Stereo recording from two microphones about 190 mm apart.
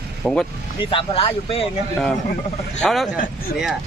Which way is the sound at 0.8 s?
30° left (ahead or behind).